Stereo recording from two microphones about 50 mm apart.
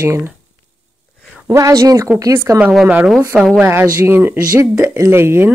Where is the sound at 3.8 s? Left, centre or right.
Right.